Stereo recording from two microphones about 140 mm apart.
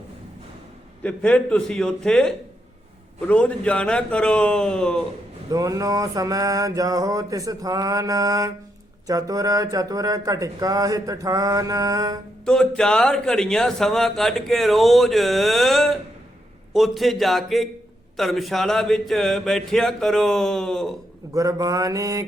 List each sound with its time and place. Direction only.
1.0 s a man's voice: 5° left (ahead or behind)
5.5 s speech: 25° right (ahead or behind)
12.5 s speech: 5° left (ahead or behind)
21.3 s speech: 25° right (ahead or behind)